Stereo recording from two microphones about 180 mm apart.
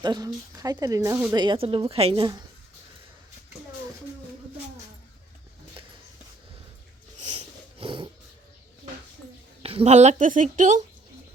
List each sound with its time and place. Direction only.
0.0 s speech: 25° right (ahead or behind)
7.2 s a sound: 35° right (ahead or behind)
9.6 s speech: 35° right (ahead or behind)